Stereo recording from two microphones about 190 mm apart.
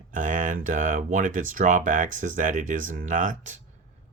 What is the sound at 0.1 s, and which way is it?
Speech, 40° right (ahead or behind).